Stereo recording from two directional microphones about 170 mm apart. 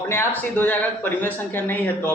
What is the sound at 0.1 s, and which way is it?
Speech, 15° left (ahead or behind).